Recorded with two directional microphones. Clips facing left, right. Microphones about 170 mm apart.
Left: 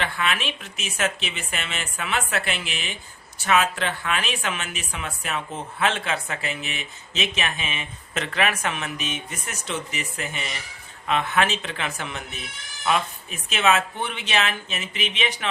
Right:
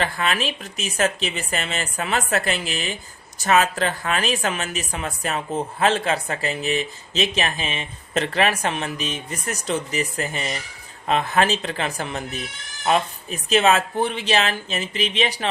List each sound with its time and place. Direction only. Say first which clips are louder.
0.0 s speech: right 3 dB; 40° right (ahead or behind)